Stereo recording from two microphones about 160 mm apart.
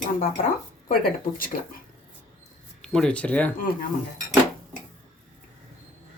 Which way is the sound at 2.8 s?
5° left (ahead or behind).